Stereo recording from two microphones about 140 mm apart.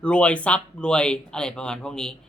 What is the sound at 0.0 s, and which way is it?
A man's voice, 10° left (ahead or behind).